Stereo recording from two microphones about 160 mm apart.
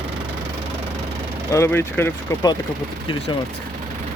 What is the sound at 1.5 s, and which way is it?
Speech, 15° left (ahead or behind).